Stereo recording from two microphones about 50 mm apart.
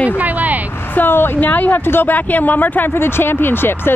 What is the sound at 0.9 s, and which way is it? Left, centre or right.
Speech, left.